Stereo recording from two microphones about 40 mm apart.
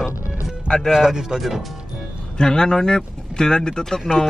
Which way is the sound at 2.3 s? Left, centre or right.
Centre.